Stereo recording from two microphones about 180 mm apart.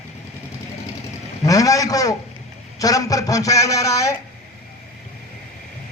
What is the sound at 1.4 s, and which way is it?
A man's voice, 20° left (ahead or behind).